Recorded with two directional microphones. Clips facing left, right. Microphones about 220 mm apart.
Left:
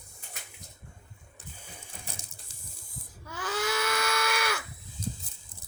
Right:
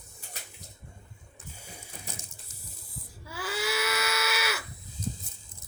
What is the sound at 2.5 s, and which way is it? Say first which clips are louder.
Spray: right 2 dB; 35° left (ahead or behind).